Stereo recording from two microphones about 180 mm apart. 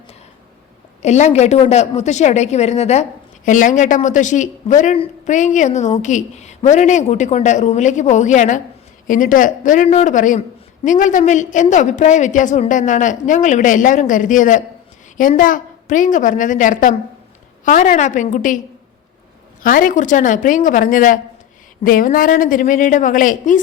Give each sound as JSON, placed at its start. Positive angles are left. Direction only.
{"t": 1.0, "sound": "a woman's voice", "side_deg": 40}
{"t": 19.6, "sound": "a woman's voice", "side_deg": 50}